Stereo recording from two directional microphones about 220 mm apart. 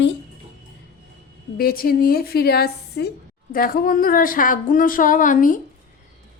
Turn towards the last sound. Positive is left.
turn(degrees=35)  # may be behind; listen again after turning